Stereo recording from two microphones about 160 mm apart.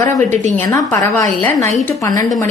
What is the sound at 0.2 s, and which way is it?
Speech, 50° right (ahead or behind).